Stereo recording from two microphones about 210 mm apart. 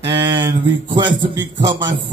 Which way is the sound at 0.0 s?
20° right (ahead or behind).